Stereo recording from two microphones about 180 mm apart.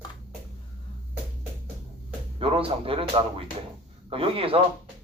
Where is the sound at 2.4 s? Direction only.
30° right (ahead or behind).